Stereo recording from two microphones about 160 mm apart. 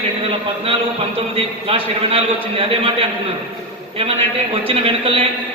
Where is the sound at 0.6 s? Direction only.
35° right (ahead or behind).